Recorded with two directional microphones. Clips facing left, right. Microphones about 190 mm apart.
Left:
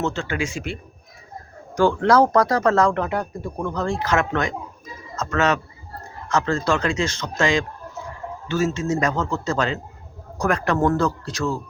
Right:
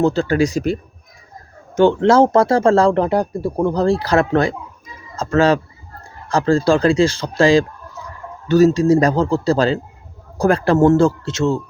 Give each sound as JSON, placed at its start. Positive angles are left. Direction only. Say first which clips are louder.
{"t": 0.0, "sound": "speech", "louder": "right 9 dB", "side_deg": -35}
{"t": 1.7, "sound": "speech", "louder": "right 5 dB", "side_deg": -25}